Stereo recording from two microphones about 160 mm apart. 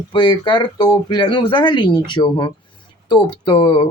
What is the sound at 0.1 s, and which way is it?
Speech, 30° left (ahead or behind).